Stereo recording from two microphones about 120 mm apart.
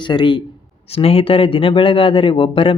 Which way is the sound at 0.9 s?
55° left (ahead or behind).